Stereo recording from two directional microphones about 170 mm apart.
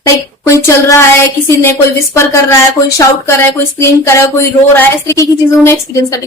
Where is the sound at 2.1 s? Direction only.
15° left (ahead or behind).